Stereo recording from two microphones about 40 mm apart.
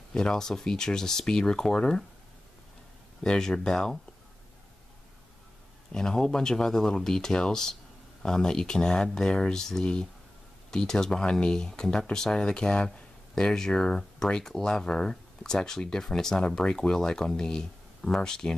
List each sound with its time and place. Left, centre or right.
0.1 s speech: centre
3.3 s speech: centre
5.9 s speech: centre